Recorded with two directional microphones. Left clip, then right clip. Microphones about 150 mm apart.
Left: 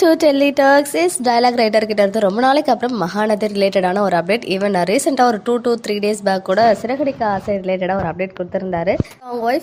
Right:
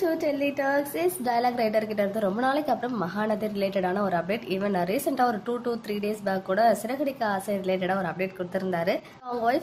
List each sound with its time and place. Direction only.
0.0 s a woman's voice: 70° left (ahead or behind); by 9.0 s 30° left (ahead or behind)